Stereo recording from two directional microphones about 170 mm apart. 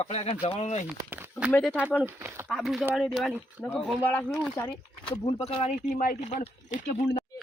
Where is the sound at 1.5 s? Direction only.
10° left (ahead or behind).